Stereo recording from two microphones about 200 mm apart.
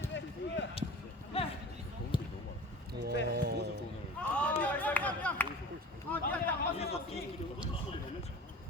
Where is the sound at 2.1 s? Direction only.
25° left (ahead or behind).